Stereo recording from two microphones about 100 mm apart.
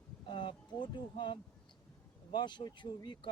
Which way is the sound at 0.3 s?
55° left (ahead or behind).